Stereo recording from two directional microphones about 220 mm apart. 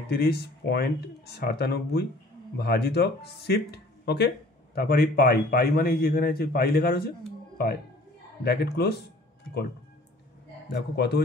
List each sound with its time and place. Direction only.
0.1 s a man's voice: 45° left (ahead or behind)
10.7 s a man's voice: 50° left (ahead or behind)